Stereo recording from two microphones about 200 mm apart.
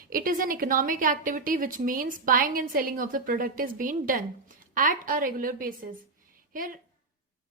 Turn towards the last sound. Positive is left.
turn(degrees=-45)  # may be behind; listen again after turning